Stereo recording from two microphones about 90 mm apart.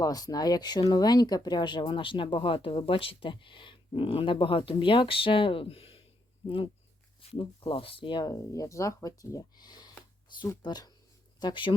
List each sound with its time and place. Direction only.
0.0 s speech: 45° left (ahead or behind); by 6.0 s 90° left
7.2 s speech: 90° left; by 8.3 s 60° left (ahead or behind)
8.3 s speech: 40° left (ahead or behind); by 11.7 s 60° left (ahead or behind)